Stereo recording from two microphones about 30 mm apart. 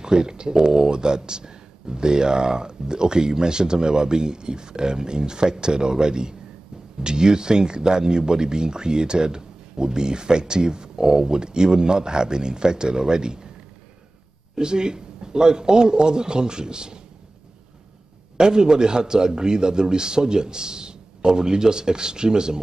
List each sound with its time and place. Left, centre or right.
0.0 s speech: right
14.5 s speech: right
18.4 s speech: right